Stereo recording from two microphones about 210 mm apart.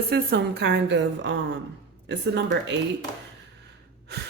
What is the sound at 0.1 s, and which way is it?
A woman's voice, 50° right (ahead or behind).